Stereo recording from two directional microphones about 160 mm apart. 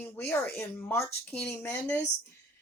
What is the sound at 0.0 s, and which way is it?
Speech, 5° left (ahead or behind).